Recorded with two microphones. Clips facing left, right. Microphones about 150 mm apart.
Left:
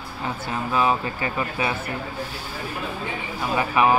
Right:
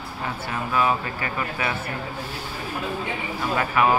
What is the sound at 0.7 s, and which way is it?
Speech, 25° left (ahead or behind).